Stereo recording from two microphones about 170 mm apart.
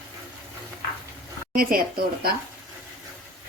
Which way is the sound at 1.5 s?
60° right (ahead or behind).